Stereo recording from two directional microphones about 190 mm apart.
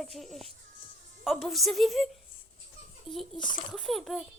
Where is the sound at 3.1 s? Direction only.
Centre (ahead or behind).